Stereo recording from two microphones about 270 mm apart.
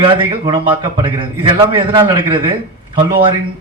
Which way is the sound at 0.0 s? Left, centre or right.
Centre.